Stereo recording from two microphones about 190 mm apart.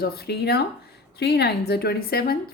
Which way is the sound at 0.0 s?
55° left (ahead or behind).